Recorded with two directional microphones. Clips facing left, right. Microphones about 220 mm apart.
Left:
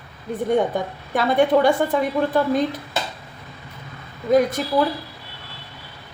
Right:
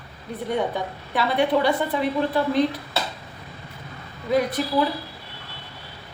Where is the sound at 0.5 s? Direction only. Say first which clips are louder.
Left 2 dB; 45° left (ahead or behind).